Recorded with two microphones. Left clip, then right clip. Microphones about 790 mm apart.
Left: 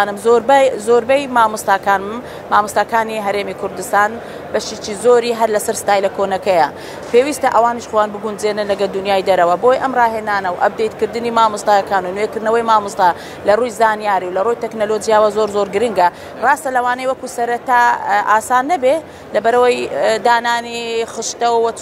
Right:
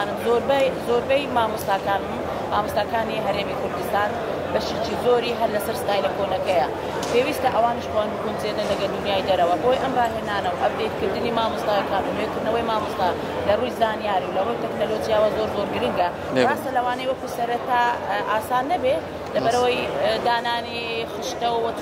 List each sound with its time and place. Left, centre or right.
0.0 s speech: left